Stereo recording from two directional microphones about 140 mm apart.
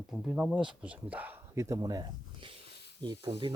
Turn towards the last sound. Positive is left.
turn(degrees=-35)  # may be behind; listen again after turning